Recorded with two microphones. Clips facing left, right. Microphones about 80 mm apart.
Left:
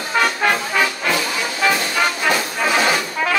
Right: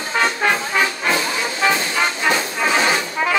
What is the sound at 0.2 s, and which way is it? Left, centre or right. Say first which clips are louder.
Music: even; right.